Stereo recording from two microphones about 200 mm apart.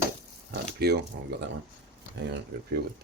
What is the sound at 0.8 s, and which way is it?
Speech, 55° right (ahead or behind).